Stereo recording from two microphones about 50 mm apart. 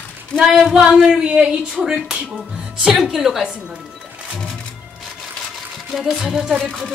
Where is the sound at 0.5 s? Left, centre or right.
Centre.